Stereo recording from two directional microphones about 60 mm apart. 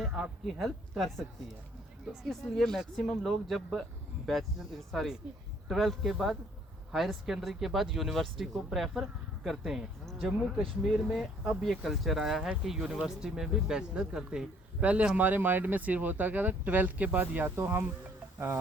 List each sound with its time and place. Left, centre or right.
0.0 s speech: centre
2.2 s speech: centre; by 17.5 s right
17.5 s speech: right